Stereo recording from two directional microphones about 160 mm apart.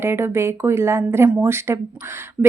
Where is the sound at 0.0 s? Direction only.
15° right (ahead or behind).